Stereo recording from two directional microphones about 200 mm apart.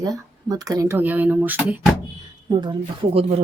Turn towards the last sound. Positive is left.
turn(degrees=-25)  # may be behind; listen again after turning